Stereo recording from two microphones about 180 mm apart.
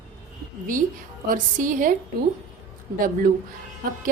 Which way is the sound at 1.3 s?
50° right (ahead or behind).